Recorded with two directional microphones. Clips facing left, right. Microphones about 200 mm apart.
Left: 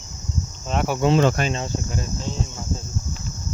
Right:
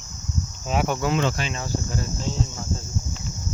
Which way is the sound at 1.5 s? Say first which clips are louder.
Left 2 dB; 20° left (ahead or behind).